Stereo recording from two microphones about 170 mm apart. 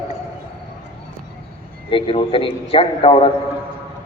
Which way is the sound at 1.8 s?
30° left (ahead or behind).